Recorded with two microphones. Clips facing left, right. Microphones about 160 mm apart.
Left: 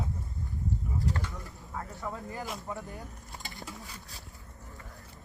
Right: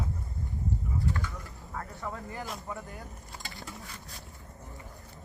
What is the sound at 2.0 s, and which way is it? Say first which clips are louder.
Speech: even; 15° left (ahead or behind).